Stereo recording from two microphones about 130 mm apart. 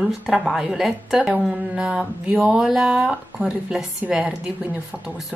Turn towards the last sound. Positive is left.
turn(degrees=-5)  # may be behind; listen again after turning